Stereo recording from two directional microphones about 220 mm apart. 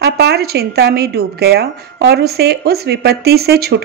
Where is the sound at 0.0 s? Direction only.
45° right (ahead or behind).